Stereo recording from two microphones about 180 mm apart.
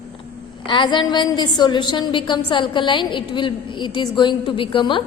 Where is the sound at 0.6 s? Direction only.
25° left (ahead or behind).